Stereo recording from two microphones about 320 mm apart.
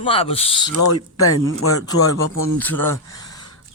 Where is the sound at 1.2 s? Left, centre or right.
Left.